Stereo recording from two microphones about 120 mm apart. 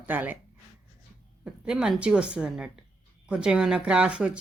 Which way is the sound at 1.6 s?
5° right (ahead or behind).